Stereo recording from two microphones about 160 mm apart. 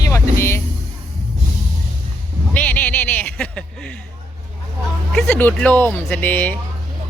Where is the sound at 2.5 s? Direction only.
10° left (ahead or behind).